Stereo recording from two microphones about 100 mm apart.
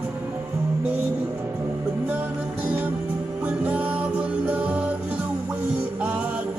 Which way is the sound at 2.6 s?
15° right (ahead or behind).